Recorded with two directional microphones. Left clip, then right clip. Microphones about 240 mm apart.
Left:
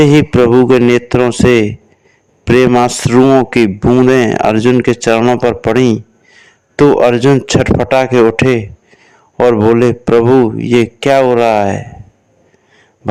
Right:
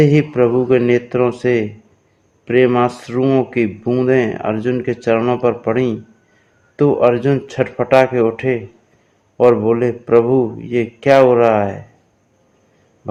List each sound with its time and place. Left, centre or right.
0.0 s a man's voice: left